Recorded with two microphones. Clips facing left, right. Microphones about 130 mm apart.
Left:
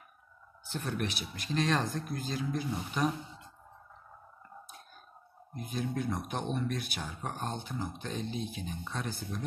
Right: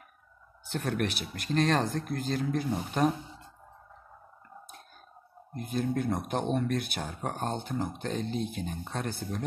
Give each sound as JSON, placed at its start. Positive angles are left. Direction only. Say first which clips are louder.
{"t": 0.7, "sound": "speech", "louder": "right 4 dB", "side_deg": -65}
{"t": 5.5, "sound": "speech", "louder": "right 5 dB", "side_deg": -55}